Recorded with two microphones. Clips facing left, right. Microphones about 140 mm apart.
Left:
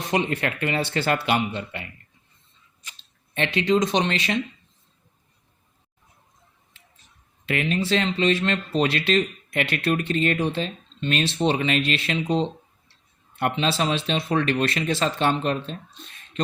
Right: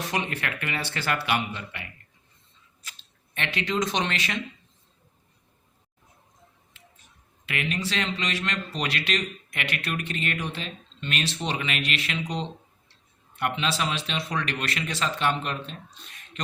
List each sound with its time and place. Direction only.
0.0 s speech: 25° left (ahead or behind)
3.3 s speech: 30° left (ahead or behind)
7.4 s speech: 30° left (ahead or behind)